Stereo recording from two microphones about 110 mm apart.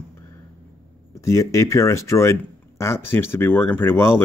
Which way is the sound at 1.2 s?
25° left (ahead or behind).